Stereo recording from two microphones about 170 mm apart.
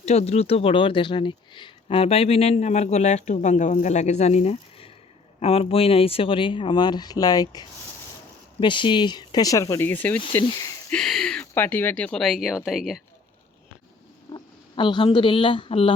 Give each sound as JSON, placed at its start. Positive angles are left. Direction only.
{"t": 0.0, "sound": "speech", "side_deg": 40}
{"t": 10.4, "sound": "speech", "side_deg": 25}
{"t": 10.9, "sound": "speech", "side_deg": 0}
{"t": 14.3, "sound": "speech", "side_deg": 30}